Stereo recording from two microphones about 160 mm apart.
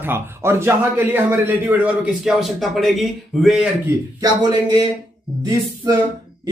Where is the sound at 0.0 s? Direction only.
15° right (ahead or behind).